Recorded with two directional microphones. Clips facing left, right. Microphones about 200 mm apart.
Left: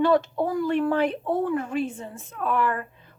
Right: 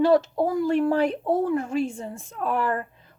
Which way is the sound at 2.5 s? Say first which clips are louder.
Even; 40° right (ahead or behind).